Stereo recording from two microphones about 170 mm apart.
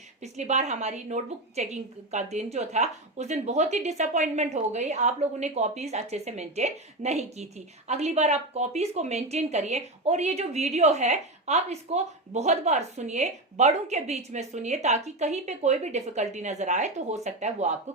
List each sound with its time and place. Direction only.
0.2 s a woman's voice: 40° right (ahead or behind)